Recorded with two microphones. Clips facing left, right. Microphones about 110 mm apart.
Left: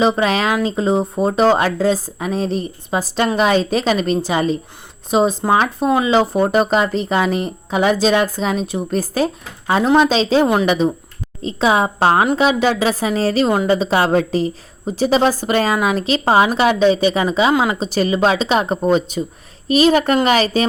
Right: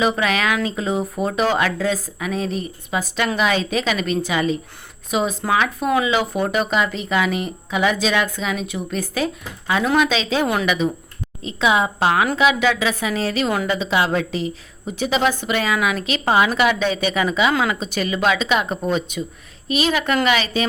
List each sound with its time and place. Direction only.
0.0 s speech: 30° left (ahead or behind)